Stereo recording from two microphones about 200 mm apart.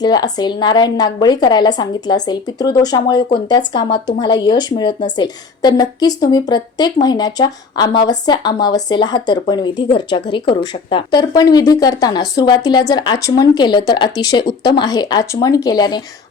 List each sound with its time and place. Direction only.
0.0 s speech: 20° left (ahead or behind)